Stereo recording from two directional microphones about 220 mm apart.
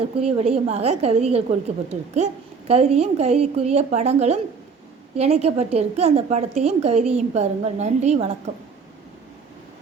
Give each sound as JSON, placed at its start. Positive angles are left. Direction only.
{"t": 0.2, "sound": "a woman's voice", "side_deg": -25}